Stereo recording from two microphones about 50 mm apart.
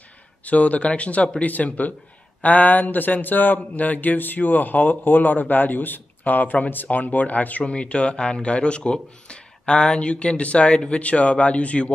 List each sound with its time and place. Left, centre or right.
0.5 s speech: left
7.6 s speech: left